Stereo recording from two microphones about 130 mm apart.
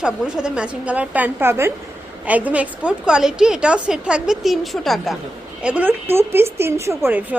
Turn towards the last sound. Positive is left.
turn(degrees=-15)  # may be behind; listen again after turning